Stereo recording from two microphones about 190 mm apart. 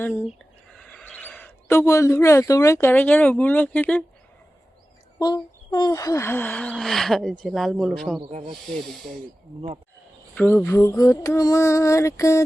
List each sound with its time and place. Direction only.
0.7 s a man's voice: 5° left (ahead or behind)
5.2 s gasp: 25° left (ahead or behind); by 8.2 s centre (ahead or behind)
8.2 s speech: 30° right (ahead or behind)
8.7 s gasp: centre (ahead or behind)
10.3 s a sound: 10° left (ahead or behind)